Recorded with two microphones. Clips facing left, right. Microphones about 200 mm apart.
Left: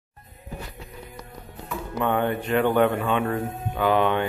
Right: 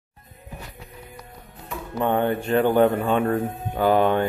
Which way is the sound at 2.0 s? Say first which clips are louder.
Right 2 dB; 35° right (ahead or behind).